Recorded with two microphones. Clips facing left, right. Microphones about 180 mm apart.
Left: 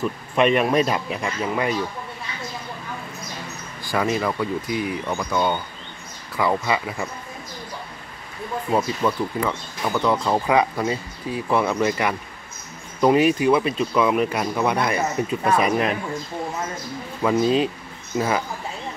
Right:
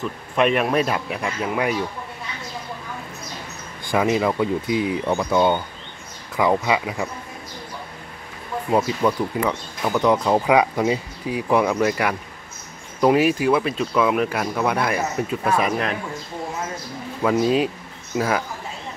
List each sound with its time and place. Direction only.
0.4 s speech: centre (ahead or behind)
3.9 s speech: 15° right (ahead or behind)
8.7 s speech: 15° right (ahead or behind)
17.2 s speech: 5° right (ahead or behind)